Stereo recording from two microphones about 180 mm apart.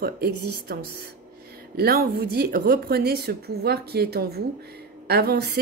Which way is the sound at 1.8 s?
60° right (ahead or behind).